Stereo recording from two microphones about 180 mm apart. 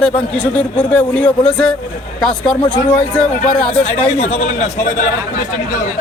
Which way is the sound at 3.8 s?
35° left (ahead or behind).